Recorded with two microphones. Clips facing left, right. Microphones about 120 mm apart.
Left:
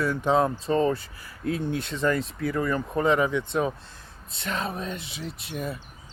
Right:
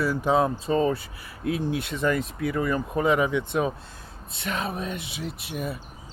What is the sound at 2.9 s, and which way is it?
Speech, 15° right (ahead or behind).